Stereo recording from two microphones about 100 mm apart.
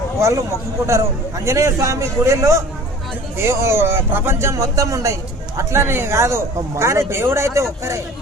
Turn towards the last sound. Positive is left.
turn(degrees=-30)  # may be behind; listen again after turning